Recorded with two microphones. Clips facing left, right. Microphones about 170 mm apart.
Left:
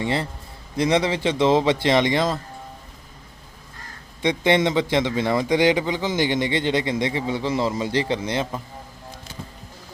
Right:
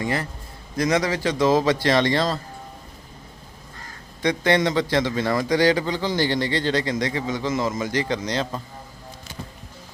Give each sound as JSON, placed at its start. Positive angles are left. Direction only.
{"t": 0.0, "sound": "a man's voice", "side_deg": 25}
{"t": 4.2, "sound": "a man's voice", "side_deg": 20}